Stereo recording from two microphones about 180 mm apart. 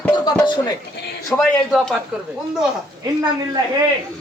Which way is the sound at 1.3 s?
Centre (ahead or behind).